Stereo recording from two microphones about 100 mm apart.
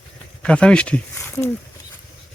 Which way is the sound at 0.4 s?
10° left (ahead or behind).